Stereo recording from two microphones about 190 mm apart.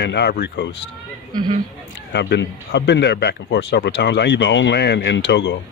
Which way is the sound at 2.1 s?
65° left (ahead or behind).